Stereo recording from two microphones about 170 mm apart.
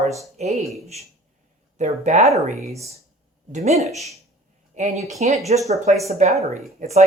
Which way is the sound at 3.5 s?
40° right (ahead or behind).